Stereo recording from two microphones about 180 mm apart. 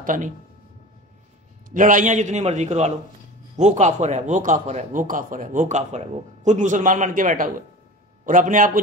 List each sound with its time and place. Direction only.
0.0 s speech: 45° right (ahead or behind)
1.7 s a man's voice: 45° right (ahead or behind)